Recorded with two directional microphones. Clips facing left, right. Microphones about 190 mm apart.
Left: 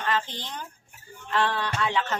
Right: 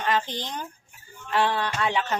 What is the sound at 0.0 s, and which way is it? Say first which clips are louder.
A woman's voice: right 3 dB; 15° right (ahead or behind).